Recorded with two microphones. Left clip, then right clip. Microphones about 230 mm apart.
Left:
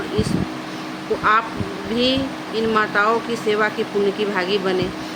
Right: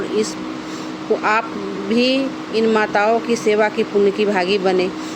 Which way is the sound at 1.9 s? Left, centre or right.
Right.